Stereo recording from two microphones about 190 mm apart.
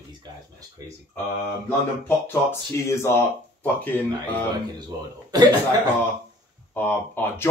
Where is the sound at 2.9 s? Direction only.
15° left (ahead or behind).